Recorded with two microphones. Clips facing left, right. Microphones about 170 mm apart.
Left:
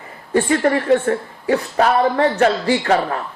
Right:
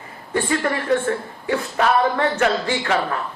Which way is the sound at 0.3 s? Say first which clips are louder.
Left 5 dB; 40° left (ahead or behind).